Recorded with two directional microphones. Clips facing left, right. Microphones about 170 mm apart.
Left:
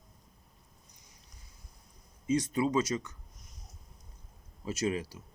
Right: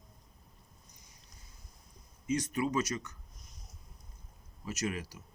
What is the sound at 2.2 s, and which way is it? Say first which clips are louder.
Speech: left 3 dB; 25° left (ahead or behind).